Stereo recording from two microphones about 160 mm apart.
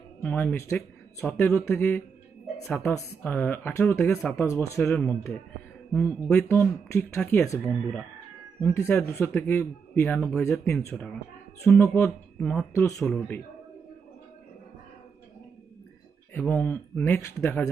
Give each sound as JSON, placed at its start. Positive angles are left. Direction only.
{"t": 0.2, "sound": "speech", "side_deg": 10}
{"t": 2.6, "sound": "speech", "side_deg": 0}
{"t": 4.1, "sound": "speech", "side_deg": 5}
{"t": 4.4, "sound": "speech", "side_deg": 15}
{"t": 11.9, "sound": "speech", "side_deg": 10}
{"t": 12.7, "sound": "speech", "side_deg": 15}
{"t": 16.3, "sound": "speech", "side_deg": 10}